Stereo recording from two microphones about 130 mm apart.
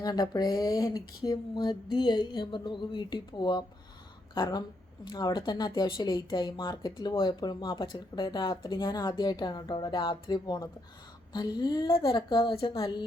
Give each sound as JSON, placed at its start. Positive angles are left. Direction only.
{"t": 0.0, "sound": "speech", "side_deg": 30}